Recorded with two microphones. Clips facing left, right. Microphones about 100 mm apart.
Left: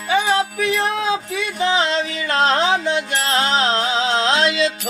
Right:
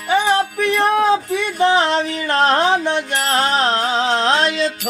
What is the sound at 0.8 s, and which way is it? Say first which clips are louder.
Music: right 5 dB; 50° right (ahead or behind).